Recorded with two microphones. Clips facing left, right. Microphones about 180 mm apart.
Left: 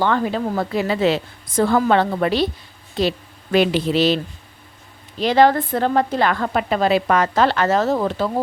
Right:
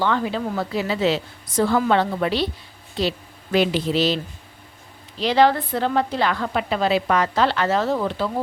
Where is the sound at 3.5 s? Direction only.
60° left (ahead or behind).